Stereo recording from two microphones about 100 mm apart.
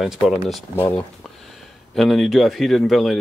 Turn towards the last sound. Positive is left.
turn(degrees=0)  # may be behind; listen again after turning